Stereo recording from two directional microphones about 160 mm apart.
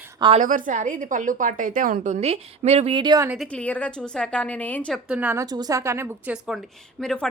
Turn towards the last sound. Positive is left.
turn(degrees=5)  # may be behind; listen again after turning